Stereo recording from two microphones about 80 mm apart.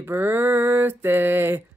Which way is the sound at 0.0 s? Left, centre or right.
Right.